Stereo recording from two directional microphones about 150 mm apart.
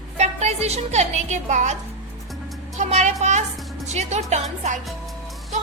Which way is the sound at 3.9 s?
45° right (ahead or behind).